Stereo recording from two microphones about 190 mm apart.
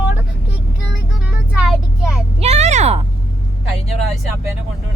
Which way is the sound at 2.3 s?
35° right (ahead or behind).